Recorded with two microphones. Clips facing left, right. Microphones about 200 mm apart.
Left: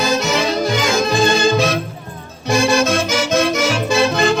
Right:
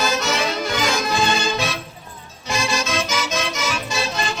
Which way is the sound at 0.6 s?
50° left (ahead or behind).